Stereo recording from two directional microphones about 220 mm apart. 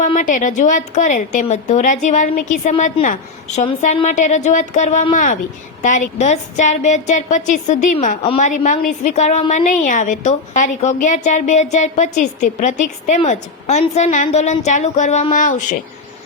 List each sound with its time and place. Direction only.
0.0 s a woman's voice: 35° left (ahead or behind)